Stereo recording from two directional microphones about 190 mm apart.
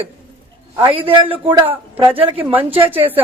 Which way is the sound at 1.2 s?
25° right (ahead or behind).